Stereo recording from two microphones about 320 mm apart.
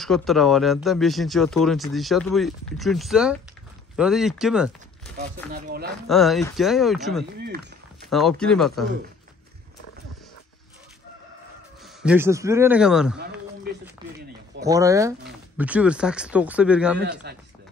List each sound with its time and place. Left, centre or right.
0.0 s speech: centre
5.5 s speech: right
6.0 s speech: centre
7.3 s run: right
8.1 s speech: centre
11.8 s a man's voice: centre
14.6 s speech: centre
17.0 s speech: right